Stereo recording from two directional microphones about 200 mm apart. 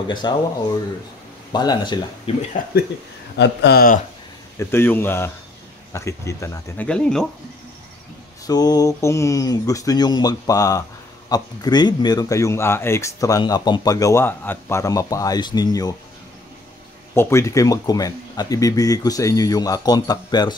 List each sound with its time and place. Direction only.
0.1 s speech: 20° left (ahead or behind)
1.5 s speech: 20° left (ahead or behind)
3.3 s speech: 55° left (ahead or behind)
4.6 s speech: 10° left (ahead or behind)
6.9 s speech: 5° left (ahead or behind)
8.5 s speech: 20° left (ahead or behind)
17.1 s speech: 15° left (ahead or behind)